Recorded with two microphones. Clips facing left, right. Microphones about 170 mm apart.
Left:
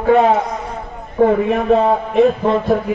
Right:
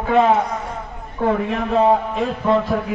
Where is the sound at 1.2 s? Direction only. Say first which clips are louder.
Left 7 dB; 60° left (ahead or behind).